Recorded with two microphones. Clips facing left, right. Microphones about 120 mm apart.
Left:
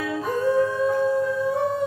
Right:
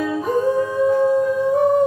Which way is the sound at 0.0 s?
15° right (ahead or behind).